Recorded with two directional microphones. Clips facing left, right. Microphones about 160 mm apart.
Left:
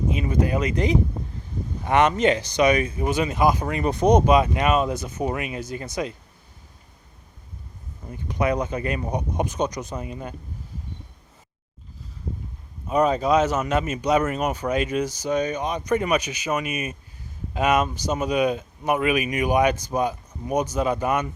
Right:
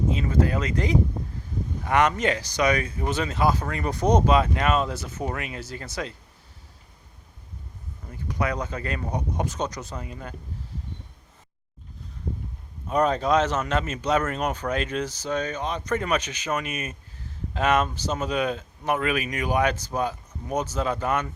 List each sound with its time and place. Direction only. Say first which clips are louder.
0.1 s speech: left 3 dB; 15° left (ahead or behind)
8.1 s speech: left 5 dB; 20° left (ahead or behind)
12.9 s speech: left 2 dB; 10° left (ahead or behind)